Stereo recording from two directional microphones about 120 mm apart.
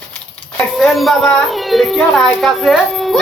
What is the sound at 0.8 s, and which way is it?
Speech, centre (ahead or behind).